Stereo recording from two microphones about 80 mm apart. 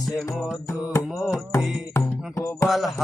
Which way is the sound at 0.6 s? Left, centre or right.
Left.